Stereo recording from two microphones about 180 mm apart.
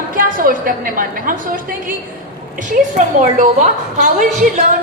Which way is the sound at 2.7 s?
45° right (ahead or behind).